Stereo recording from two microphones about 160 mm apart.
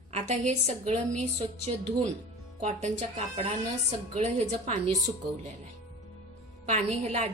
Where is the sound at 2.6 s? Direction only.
45° right (ahead or behind).